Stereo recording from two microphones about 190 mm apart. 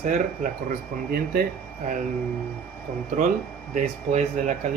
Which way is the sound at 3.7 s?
40° right (ahead or behind).